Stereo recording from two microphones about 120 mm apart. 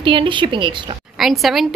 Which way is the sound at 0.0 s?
45° right (ahead or behind).